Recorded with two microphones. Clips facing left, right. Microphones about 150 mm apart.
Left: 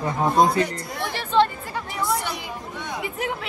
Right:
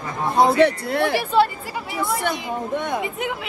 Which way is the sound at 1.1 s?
10° right (ahead or behind).